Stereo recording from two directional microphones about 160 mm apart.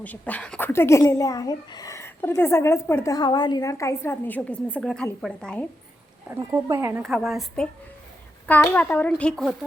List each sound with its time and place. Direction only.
0.0 s a woman's voice: 10° left (ahead or behind)
6.2 s speech: 15° right (ahead or behind)
7.0 s a woman's voice: centre (ahead or behind)